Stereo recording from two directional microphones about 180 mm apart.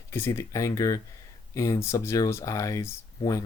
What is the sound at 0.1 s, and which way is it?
Speech, 15° left (ahead or behind).